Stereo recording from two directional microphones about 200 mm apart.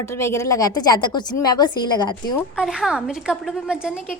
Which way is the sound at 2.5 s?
5° right (ahead or behind).